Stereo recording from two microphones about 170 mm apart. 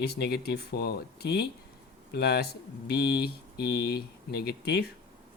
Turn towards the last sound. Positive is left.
turn(degrees=70)  # may be behind; listen again after turning